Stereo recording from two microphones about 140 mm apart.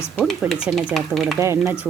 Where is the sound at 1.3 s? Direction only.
20° right (ahead or behind).